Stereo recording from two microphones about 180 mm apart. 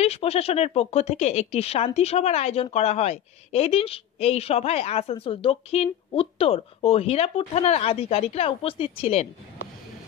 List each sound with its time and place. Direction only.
0.0 s a woman's voice: 35° left (ahead or behind)